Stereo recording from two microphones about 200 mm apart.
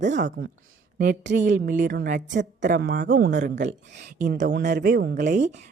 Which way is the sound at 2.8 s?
50° right (ahead or behind).